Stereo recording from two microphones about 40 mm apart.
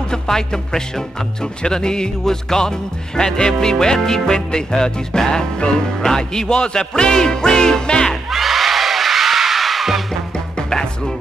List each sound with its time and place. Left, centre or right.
0.1 s music: centre
8.3 s music: centre
10.7 s music: centre